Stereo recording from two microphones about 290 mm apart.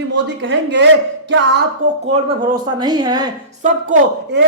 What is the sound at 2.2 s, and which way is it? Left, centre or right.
Speech, centre.